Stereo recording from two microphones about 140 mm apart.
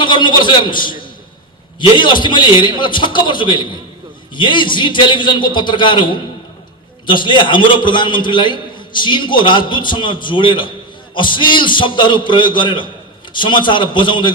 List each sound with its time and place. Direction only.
0.0 s a man's voice: 35° left (ahead or behind)